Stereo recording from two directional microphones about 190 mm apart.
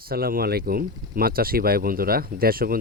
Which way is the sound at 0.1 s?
50° right (ahead or behind).